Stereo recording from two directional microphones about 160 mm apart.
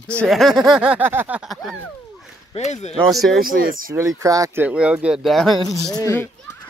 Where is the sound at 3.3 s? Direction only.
65° right (ahead or behind).